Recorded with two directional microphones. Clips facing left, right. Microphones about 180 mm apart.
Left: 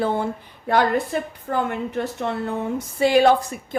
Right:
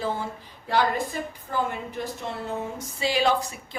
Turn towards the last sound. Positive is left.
turn(degrees=55)  # may be behind; listen again after turning